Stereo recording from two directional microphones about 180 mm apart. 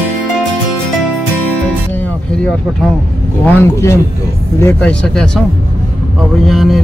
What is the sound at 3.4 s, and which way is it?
Speech, 15° left (ahead or behind).